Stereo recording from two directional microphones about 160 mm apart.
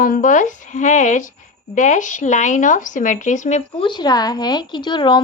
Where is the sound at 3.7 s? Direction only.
30° left (ahead or behind).